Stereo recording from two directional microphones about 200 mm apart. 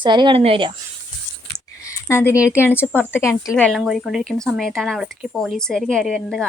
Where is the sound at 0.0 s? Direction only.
25° right (ahead or behind).